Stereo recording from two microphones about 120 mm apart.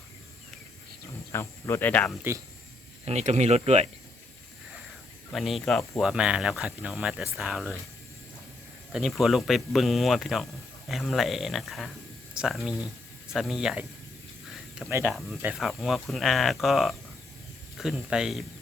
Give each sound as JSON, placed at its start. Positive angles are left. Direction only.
{"t": 1.3, "sound": "speech", "side_deg": 20}
{"t": 2.3, "sound": "speech", "side_deg": -20}
{"t": 3.1, "sound": "speech", "side_deg": -70}
{"t": 5.3, "sound": "speech", "side_deg": 0}
{"t": 8.9, "sound": "speech", "side_deg": -5}
{"t": 14.8, "sound": "speech", "side_deg": -20}
{"t": 15.5, "sound": "speech", "side_deg": 0}